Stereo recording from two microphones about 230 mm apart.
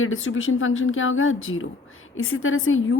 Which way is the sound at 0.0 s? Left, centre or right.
Left.